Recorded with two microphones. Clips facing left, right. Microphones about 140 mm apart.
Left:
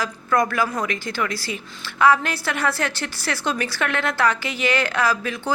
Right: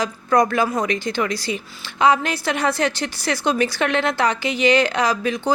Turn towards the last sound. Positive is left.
turn(degrees=-20)  # may be behind; listen again after turning